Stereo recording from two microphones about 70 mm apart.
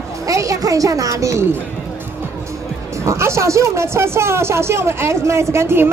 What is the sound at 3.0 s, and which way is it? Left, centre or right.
A woman's voice, right.